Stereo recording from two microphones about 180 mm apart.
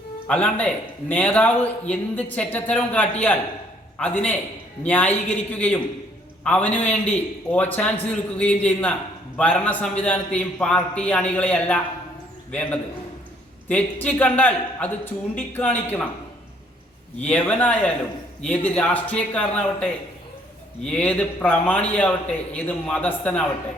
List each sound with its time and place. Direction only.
0.3 s a man's voice: 10° left (ahead or behind)
17.2 s a man's voice: 10° left (ahead or behind)